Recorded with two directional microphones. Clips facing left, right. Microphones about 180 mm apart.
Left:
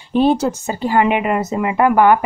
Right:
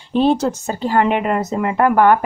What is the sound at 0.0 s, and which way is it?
Speech, 5° left (ahead or behind).